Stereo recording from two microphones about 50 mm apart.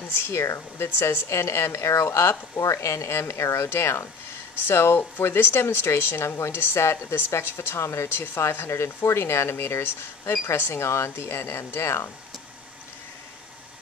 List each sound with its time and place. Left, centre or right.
0.1 s a woman's voice: left
4.6 s a woman's voice: left
7.2 s speech: left